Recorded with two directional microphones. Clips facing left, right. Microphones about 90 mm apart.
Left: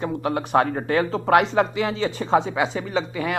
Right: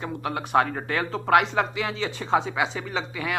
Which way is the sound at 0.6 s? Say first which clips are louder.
Left 3 dB; 15° left (ahead or behind).